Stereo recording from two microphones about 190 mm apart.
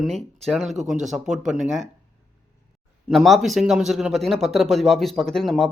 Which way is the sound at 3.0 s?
Centre (ahead or behind).